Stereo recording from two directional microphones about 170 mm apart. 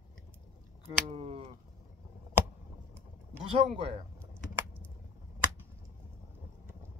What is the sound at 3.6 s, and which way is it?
Speech, 40° right (ahead or behind).